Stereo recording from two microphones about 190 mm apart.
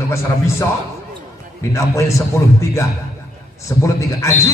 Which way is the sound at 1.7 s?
15° left (ahead or behind).